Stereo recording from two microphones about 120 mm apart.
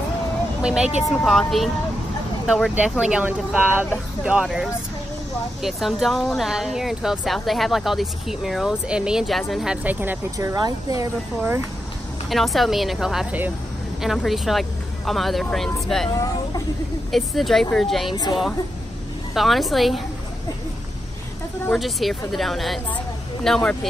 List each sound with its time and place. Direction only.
0.6 s speech: 5° right (ahead or behind)
9.8 s speech: 15° right (ahead or behind)
10.3 s speech: 30° right (ahead or behind)
12.3 s speech: centre (ahead or behind)
17.1 s speech: centre (ahead or behind)
18.1 s a woman's voice: 40° left (ahead or behind)
19.3 s speech: centre (ahead or behind)
21.7 s speech: centre (ahead or behind)